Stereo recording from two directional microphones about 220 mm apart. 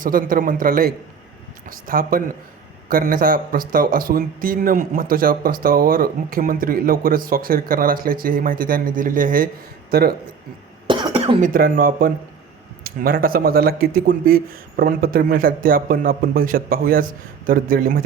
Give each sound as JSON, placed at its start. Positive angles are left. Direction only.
{"t": 0.0, "sound": "speech", "side_deg": -40}
{"t": 10.8, "sound": "cough", "side_deg": -25}
{"t": 11.3, "sound": "speech", "side_deg": -40}